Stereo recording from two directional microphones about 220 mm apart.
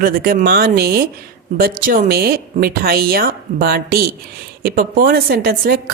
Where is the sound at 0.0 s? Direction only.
40° right (ahead or behind).